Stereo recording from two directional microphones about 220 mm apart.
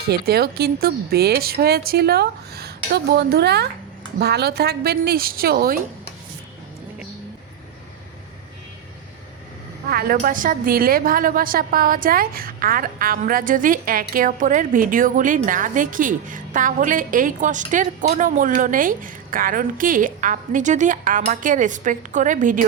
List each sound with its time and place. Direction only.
0.0 s speech: 45° right (ahead or behind)
9.9 s a woman's voice: 40° right (ahead or behind)